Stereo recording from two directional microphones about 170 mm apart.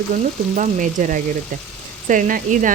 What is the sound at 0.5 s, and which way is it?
Speech, 45° right (ahead or behind).